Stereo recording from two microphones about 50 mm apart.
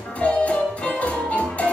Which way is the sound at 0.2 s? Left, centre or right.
Left.